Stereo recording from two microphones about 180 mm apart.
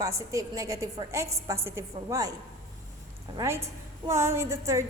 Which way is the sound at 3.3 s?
15° right (ahead or behind).